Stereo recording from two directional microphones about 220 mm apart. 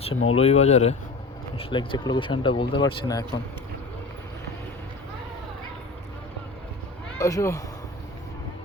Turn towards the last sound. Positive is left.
turn(degrees=15)  # may be behind; listen again after turning